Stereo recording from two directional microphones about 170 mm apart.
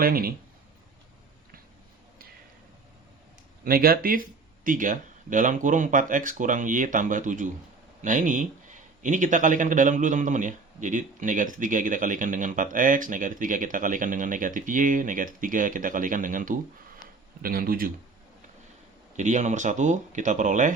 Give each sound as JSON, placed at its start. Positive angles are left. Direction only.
{"t": 0.0, "sound": "speech", "side_deg": -60}
{"t": 3.6, "sound": "speech", "side_deg": -60}
{"t": 19.1, "sound": "speech", "side_deg": -45}